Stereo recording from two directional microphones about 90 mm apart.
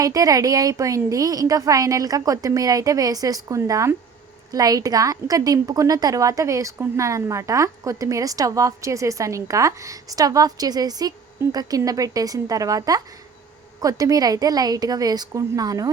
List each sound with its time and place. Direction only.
0.0 s a woman's voice: 40° right (ahead or behind)